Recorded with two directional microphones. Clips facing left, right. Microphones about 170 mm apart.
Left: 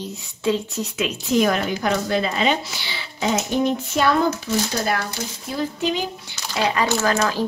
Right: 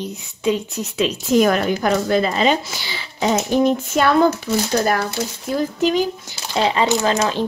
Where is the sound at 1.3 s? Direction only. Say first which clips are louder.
Right 4 dB; 45° right (ahead or behind).